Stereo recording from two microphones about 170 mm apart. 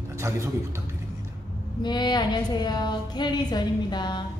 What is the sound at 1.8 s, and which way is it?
A woman's voice, 25° left (ahead or behind).